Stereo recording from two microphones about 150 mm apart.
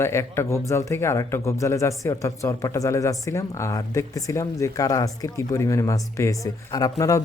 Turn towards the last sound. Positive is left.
turn(degrees=20)  # may be behind; listen again after turning